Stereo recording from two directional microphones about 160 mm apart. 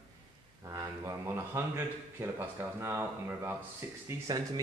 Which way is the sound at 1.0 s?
15° right (ahead or behind).